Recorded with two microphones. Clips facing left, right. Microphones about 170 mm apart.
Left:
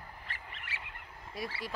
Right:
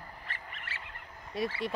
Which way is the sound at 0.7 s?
15° left (ahead or behind).